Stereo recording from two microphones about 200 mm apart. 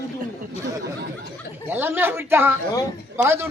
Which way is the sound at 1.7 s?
10° right (ahead or behind).